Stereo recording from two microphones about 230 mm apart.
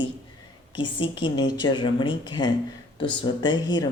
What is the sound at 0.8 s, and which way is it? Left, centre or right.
Speech, left.